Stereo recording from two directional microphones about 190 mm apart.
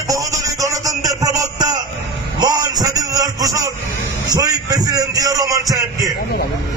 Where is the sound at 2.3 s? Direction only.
20° right (ahead or behind).